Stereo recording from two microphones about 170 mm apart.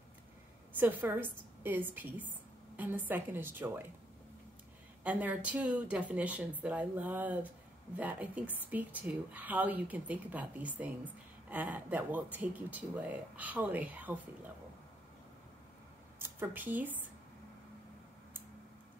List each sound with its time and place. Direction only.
0.7 s a woman's voice: 10° right (ahead or behind)
5.0 s a woman's voice: 10° right (ahead or behind)
16.2 s speech: 10° right (ahead or behind)